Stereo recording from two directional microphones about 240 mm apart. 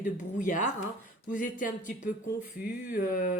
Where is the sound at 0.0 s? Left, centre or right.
Left.